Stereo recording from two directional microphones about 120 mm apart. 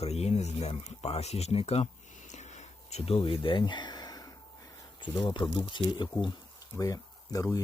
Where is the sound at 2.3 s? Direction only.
75° left (ahead or behind); by 4.3 s 30° left (ahead or behind).